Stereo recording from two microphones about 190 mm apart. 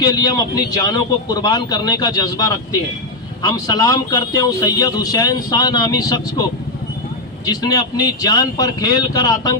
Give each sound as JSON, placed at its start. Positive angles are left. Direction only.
{"t": 0.0, "sound": "speech", "side_deg": 20}
{"t": 7.4, "sound": "speech", "side_deg": 20}